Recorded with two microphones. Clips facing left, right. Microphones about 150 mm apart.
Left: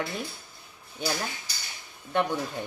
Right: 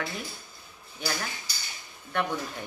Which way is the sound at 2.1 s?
20° left (ahead or behind).